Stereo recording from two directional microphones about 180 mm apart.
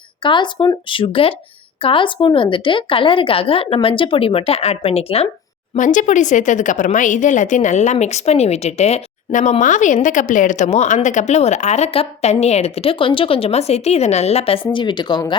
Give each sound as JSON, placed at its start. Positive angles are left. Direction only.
{"t": 0.2, "sound": "a woman's voice", "side_deg": 25}
{"t": 5.7, "sound": "speech", "side_deg": 45}